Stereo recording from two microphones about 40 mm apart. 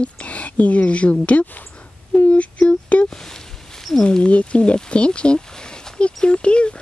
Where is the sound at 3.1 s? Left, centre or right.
Centre.